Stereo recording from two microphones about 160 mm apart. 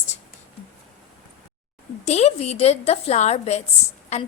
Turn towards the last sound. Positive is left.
turn(degrees=45)  # may be behind; listen again after turning